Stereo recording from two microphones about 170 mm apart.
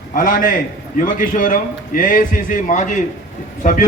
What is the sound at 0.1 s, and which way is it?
A man's voice, 55° left (ahead or behind).